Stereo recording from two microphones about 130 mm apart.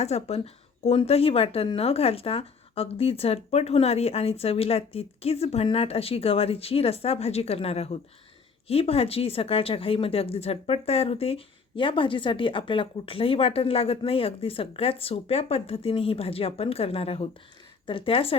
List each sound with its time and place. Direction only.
0.0 s speech: 55° left (ahead or behind)